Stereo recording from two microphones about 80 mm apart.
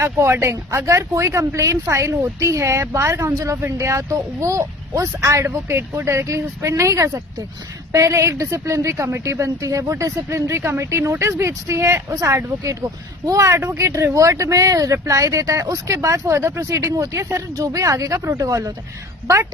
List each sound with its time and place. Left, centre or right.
0.0 s a woman's voice: right